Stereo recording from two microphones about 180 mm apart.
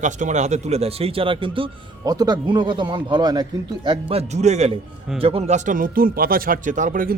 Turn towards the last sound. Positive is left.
turn(degrees=-50)  # may be behind; listen again after turning